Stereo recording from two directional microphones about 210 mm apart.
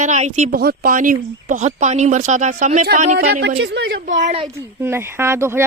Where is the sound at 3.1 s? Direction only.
50° right (ahead or behind).